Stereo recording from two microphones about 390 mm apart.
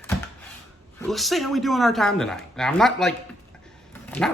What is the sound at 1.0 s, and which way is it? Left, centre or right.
Speech, centre.